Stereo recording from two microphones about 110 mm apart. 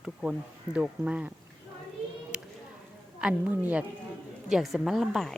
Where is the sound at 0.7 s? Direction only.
10° right (ahead or behind).